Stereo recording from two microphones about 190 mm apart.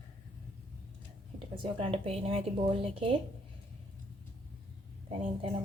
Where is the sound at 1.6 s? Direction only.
30° right (ahead or behind).